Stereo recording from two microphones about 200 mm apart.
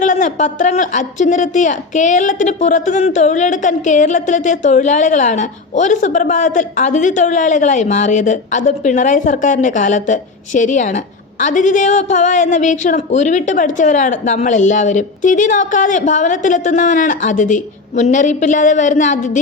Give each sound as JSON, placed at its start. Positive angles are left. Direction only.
{"t": 0.0, "sound": "a woman's voice", "side_deg": 40}